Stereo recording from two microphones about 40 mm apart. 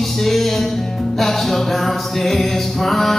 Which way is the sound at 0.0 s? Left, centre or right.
Centre.